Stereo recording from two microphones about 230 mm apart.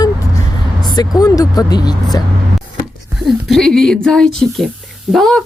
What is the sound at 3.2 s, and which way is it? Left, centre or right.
Speech, centre.